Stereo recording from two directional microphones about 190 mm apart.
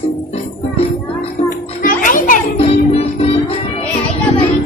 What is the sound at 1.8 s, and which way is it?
Music, 45° left (ahead or behind).